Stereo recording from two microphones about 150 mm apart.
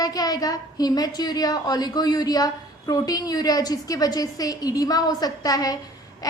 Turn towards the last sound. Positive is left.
turn(degrees=25)  # may be behind; listen again after turning